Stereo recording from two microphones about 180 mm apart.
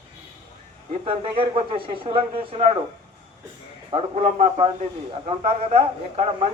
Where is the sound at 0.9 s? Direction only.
30° right (ahead or behind).